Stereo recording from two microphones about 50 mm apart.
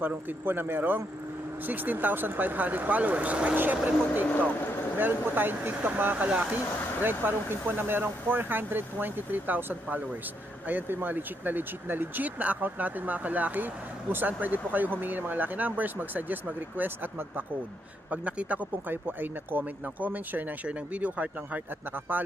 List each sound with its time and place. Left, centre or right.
0.3 s speech: right
7.0 s speech: right
18.1 s speech: right